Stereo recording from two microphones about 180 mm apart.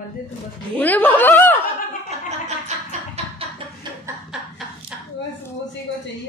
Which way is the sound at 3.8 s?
25° right (ahead or behind).